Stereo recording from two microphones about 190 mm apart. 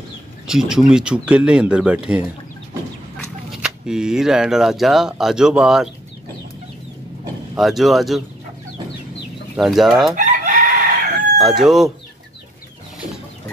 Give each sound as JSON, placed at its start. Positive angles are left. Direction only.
{"t": 0.5, "sound": "speech", "side_deg": 0}
{"t": 3.6, "sound": "speech", "side_deg": -5}
{"t": 7.5, "sound": "speech", "side_deg": 0}
{"t": 9.6, "sound": "speech", "side_deg": 0}
{"t": 10.1, "sound": "chicken", "side_deg": -45}
{"t": 11.3, "sound": "speech", "side_deg": 0}